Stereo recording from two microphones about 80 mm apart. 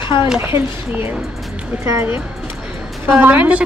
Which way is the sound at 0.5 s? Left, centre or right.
Right.